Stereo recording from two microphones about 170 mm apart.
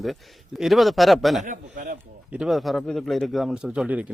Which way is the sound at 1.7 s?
55° right (ahead or behind).